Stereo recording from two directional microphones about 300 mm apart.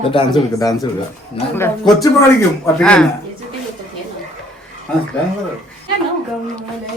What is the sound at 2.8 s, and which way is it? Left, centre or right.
Female singing, centre.